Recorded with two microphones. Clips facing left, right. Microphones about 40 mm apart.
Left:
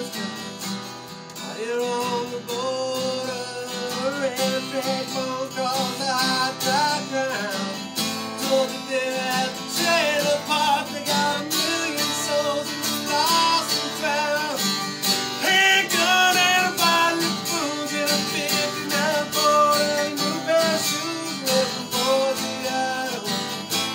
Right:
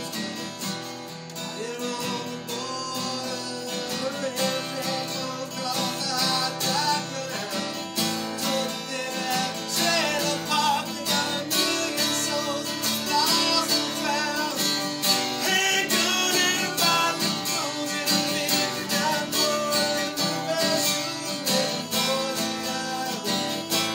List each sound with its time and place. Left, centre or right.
4.0 s music: centre
6.2 s music: left
8.5 s music: left
11.1 s music: centre
14.6 s music: centre
15.4 s music: left
16.6 s music: centre
18.3 s music: centre
19.8 s music: centre
21.5 s music: centre
23.2 s music: centre